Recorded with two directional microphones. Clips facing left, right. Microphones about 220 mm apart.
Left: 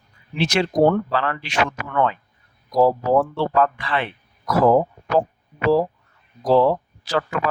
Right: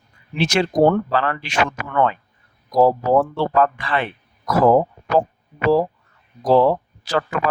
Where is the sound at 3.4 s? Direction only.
45° right (ahead or behind).